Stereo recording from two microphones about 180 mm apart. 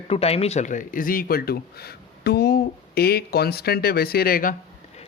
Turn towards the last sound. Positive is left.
turn(degrees=50)  # may be behind; listen again after turning